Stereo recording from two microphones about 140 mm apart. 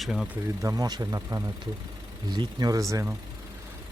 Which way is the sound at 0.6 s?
25° right (ahead or behind).